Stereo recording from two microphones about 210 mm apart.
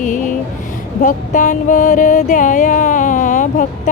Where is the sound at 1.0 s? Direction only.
35° left (ahead or behind).